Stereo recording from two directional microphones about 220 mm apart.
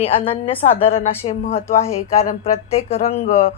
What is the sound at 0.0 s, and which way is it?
A woman's voice, 25° left (ahead or behind).